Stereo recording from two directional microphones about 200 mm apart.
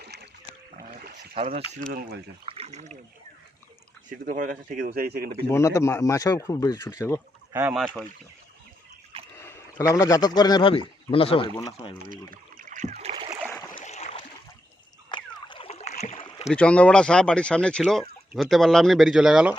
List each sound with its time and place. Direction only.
0.0 s boat: 55° right (ahead or behind)
0.8 s a sound: 50° right (ahead or behind)
1.4 s speech: 30° right (ahead or behind)
1.9 s speech: 50° right (ahead or behind)
2.5 s a sound: 30° right (ahead or behind)
4.3 s speech: 45° right (ahead or behind)
5.5 s speech: 15° left (ahead or behind)
7.5 s speech: 5° right (ahead or behind)
9.3 s speech: 10° left (ahead or behind); by 11.4 s 30° left (ahead or behind)
12.3 s boat: 40° right (ahead or behind)
13.5 s boat: 15° left (ahead or behind)
13.7 s a sound: 35° left (ahead or behind)
15.1 s rowboat: 25° left (ahead or behind)
16.5 s speech: 5° left (ahead or behind)